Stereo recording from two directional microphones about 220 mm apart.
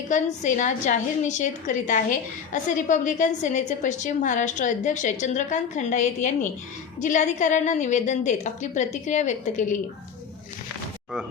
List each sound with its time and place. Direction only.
0.1 s a woman's voice: 35° left (ahead or behind)